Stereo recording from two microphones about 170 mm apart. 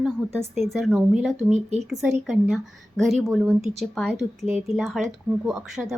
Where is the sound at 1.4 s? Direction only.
40° right (ahead or behind).